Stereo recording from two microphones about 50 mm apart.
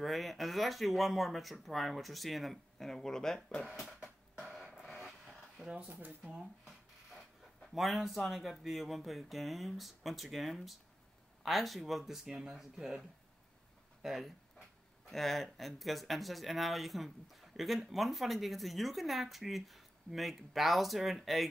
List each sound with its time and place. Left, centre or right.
0.0 s speech: centre
3.7 s a sound: centre
5.0 s dog: centre
5.9 s speech: right
6.6 s a sound: centre
8.3 s speech: centre
14.0 s speech: centre
15.0 s speech: centre